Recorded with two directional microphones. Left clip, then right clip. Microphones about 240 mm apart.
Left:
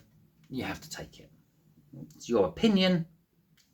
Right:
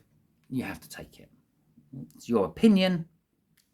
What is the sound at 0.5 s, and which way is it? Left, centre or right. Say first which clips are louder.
Speech: right 1 dB; right.